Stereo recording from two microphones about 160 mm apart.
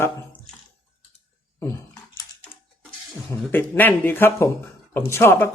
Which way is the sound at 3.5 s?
10° left (ahead or behind).